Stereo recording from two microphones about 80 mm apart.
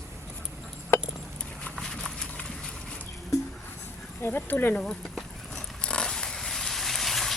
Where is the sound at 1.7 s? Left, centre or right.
Centre.